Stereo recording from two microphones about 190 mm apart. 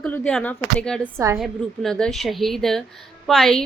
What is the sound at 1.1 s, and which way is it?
Speech, 15° right (ahead or behind).